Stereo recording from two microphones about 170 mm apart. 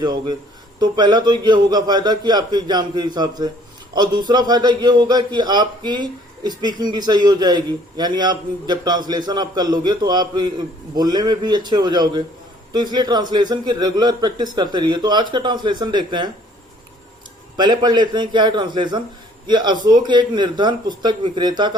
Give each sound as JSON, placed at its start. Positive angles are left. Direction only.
{"t": 0.0, "sound": "a man's voice", "side_deg": -25}
{"t": 17.6, "sound": "a man's voice", "side_deg": -25}